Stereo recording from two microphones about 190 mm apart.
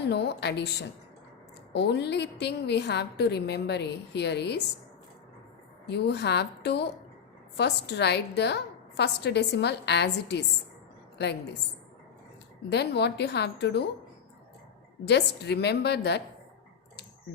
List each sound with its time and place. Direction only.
0.0 s a woman's voice: 60° left (ahead or behind)
5.9 s a woman's voice: 60° left (ahead or behind)
12.7 s a woman's voice: 60° left (ahead or behind)
15.0 s a woman's voice: 65° left (ahead or behind)